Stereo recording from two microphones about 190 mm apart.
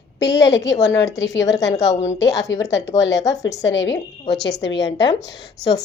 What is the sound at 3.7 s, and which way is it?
A woman's voice, 70° left (ahead or behind).